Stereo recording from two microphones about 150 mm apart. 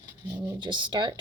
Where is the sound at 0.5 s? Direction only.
30° right (ahead or behind).